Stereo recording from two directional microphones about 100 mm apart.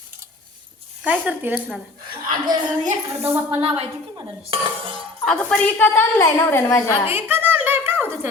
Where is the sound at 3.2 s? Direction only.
25° right (ahead or behind).